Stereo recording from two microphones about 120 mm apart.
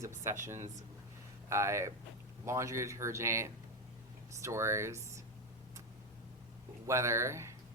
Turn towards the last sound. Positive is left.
turn(degrees=-25)  # may be behind; listen again after turning